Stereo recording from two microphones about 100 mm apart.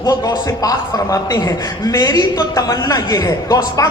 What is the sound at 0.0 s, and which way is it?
A woman's voice, 40° left (ahead or behind).